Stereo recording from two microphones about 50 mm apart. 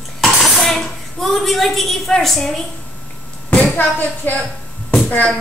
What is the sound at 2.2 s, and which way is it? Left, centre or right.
Speech, centre.